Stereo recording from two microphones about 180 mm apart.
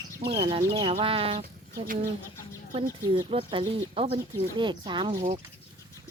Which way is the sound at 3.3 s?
30° right (ahead or behind).